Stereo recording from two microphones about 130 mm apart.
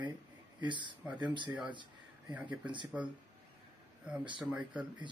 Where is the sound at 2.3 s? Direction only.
10° right (ahead or behind).